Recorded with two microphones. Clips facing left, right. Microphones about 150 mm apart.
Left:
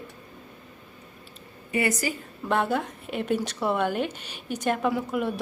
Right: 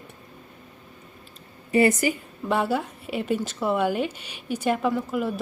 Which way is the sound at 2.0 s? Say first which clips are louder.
Right 5 dB; 20° right (ahead or behind).